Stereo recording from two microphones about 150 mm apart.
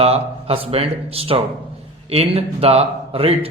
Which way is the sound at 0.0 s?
40° right (ahead or behind).